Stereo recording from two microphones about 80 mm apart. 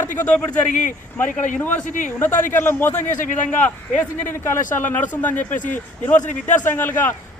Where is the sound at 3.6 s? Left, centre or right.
Centre.